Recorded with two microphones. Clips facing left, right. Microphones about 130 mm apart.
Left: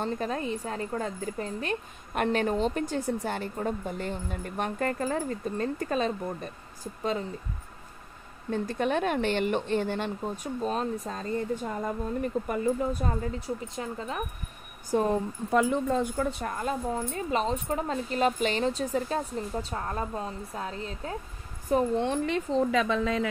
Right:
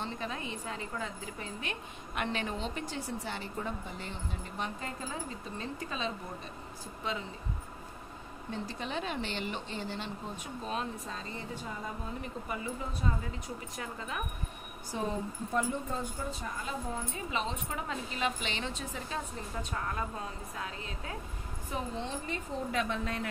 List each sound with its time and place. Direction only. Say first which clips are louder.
0.0 s a woman's voice: left 8 dB; 45° left (ahead or behind)
8.5 s speech: left 10 dB; 50° left (ahead or behind)
10.3 s a woman's voice: left 5 dB; 40° left (ahead or behind)
13.7 s speech: left 5 dB; 35° left (ahead or behind)
14.9 s speech: left 10 dB; 55° left (ahead or behind)
15.5 s a woman's voice: left 9 dB; 90° left; by 22.0 s 45° left (ahead or behind)
22.0 s speech: left 10 dB; 70° left (ahead or behind); by 22.7 s 90° left